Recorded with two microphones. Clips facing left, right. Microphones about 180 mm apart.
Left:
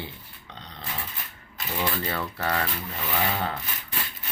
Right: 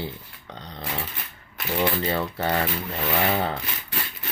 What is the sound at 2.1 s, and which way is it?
Speech, 25° right (ahead or behind).